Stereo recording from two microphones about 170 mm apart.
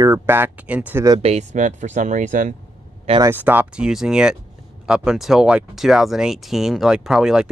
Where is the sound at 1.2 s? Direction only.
45° right (ahead or behind).